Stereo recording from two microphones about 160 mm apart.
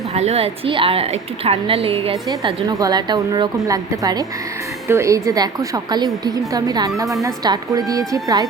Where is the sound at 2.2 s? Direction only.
25° right (ahead or behind).